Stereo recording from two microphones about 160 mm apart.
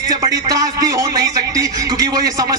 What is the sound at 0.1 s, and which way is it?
A man's voice, 25° right (ahead or behind).